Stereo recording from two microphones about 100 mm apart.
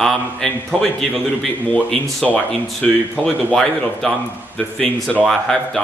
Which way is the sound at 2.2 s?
15° left (ahead or behind).